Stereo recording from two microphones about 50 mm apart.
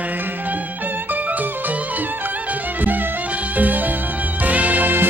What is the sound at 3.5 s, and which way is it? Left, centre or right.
Music, right.